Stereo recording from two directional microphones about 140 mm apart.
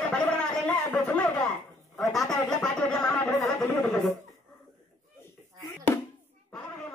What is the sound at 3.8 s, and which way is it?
Chuckle, 5° left (ahead or behind).